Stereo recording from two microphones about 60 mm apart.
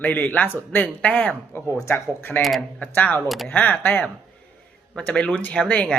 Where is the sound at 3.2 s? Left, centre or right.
Centre.